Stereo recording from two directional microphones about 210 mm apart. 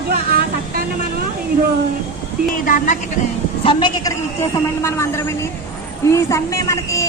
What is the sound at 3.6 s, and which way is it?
Speech, 20° left (ahead or behind).